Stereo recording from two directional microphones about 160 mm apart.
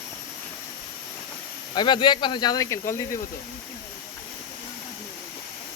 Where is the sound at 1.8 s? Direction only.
30° left (ahead or behind).